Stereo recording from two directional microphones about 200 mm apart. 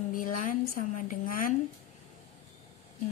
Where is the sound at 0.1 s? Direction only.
40° left (ahead or behind).